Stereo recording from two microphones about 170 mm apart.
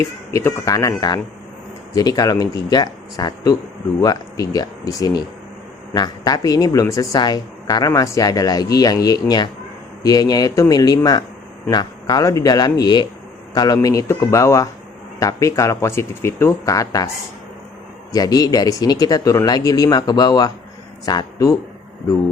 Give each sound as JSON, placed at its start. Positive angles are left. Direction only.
{"t": 0.0, "sound": "speech", "side_deg": 15}
{"t": 18.1, "sound": "speech", "side_deg": 20}